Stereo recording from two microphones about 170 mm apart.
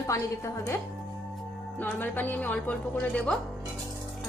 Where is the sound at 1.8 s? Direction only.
10° left (ahead or behind).